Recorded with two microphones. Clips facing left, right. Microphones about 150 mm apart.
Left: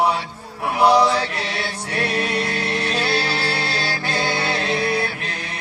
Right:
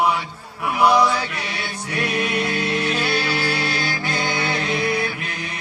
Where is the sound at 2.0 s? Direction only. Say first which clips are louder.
Even; 15° right (ahead or behind).